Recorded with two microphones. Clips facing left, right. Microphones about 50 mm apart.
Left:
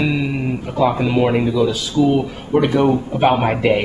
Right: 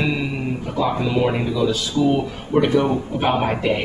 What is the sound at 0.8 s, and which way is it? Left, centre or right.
Speech, left.